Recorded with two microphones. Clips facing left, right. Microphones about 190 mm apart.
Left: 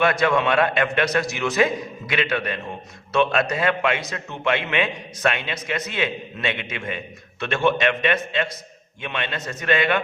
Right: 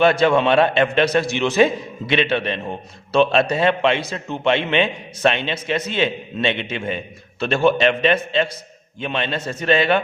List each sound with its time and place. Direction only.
0.0 s a man's voice: 30° right (ahead or behind)